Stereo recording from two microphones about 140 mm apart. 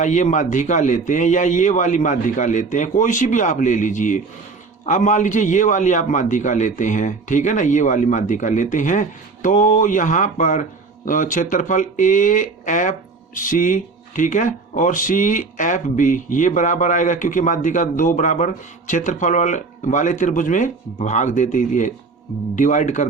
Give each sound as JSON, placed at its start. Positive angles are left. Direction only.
{"t": 0.0, "sound": "a man's voice", "side_deg": 60}